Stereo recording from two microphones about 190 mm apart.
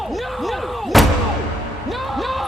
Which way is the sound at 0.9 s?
Centre (ahead or behind).